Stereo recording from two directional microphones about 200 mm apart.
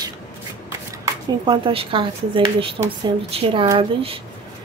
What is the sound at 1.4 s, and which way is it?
Speech, 25° right (ahead or behind).